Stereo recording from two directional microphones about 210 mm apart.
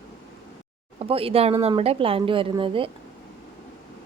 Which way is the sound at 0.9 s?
25° right (ahead or behind).